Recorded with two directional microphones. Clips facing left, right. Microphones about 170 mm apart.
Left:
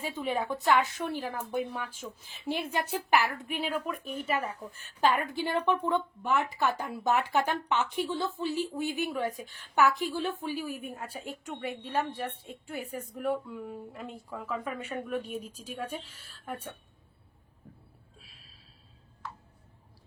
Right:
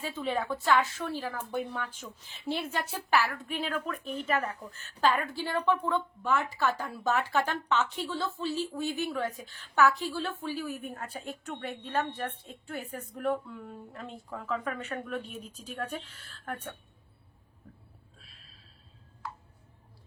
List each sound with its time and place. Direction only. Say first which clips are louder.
0.0 s a woman's voice: even; 10° left (ahead or behind)
15.2 s a woman's voice: left 5 dB; 45° left (ahead or behind)
15.5 s a woman's voice: even; 10° left (ahead or behind)